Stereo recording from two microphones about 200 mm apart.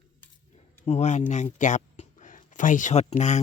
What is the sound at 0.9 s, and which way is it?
A woman's voice, 35° left (ahead or behind).